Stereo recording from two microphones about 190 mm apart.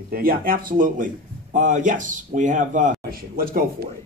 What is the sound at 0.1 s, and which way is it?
A man's voice, 50° right (ahead or behind).